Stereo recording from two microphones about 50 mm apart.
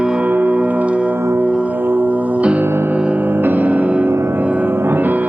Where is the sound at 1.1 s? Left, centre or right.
Right.